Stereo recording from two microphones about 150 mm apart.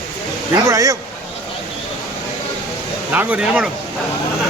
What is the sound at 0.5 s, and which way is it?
Speech, 20° right (ahead or behind).